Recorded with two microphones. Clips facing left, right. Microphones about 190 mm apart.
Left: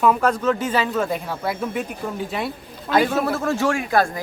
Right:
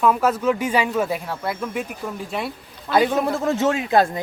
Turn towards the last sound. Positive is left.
turn(degrees=-20)  # may be behind; listen again after turning